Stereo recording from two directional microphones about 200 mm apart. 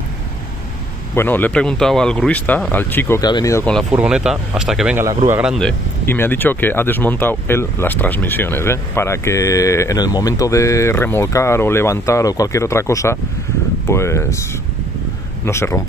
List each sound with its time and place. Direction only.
1.1 s speech: 10° left (ahead or behind)
3.9 s speech: 5° right (ahead or behind)
5.0 s speech: 15° right (ahead or behind)
5.4 s speech: centre (ahead or behind)
15.4 s speech: 15° left (ahead or behind)